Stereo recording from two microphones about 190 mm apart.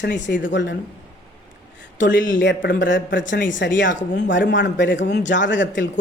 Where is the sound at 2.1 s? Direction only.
45° left (ahead or behind).